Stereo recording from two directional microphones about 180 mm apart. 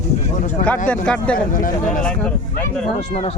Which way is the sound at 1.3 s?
50° left (ahead or behind).